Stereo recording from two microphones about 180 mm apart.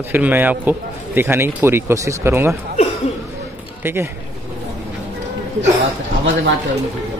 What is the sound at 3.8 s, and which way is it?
Speech, 15° right (ahead or behind).